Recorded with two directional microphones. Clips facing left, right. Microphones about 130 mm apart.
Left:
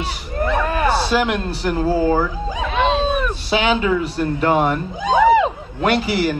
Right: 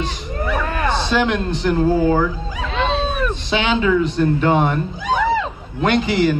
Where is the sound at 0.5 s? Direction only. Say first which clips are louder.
Left 2 dB; 10° left (ahead or behind).